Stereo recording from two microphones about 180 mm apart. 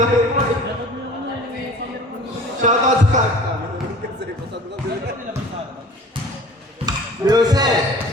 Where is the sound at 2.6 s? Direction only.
40° right (ahead or behind).